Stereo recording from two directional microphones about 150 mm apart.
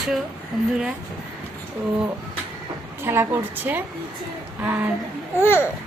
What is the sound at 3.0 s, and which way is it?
Speech, 15° right (ahead or behind).